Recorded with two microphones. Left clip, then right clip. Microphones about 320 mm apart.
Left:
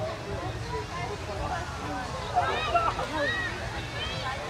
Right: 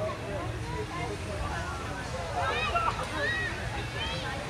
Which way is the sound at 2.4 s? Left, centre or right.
Left.